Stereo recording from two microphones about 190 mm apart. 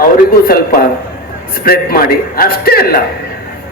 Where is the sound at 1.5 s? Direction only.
50° left (ahead or behind).